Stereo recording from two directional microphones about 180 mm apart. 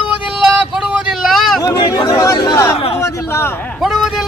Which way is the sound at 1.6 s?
25° left (ahead or behind).